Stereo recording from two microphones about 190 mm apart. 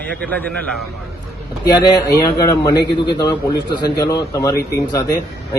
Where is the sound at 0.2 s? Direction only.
5° left (ahead or behind).